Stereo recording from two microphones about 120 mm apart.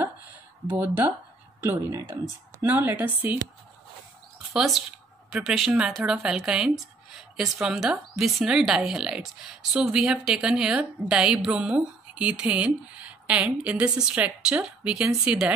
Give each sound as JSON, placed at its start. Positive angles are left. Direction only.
{"t": 0.7, "sound": "speech", "side_deg": -15}
{"t": 4.6, "sound": "speech", "side_deg": 0}